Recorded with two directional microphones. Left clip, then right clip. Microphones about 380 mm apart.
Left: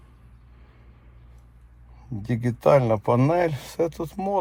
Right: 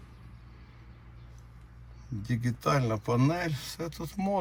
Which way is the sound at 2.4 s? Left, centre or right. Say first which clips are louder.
Left 11 dB; centre.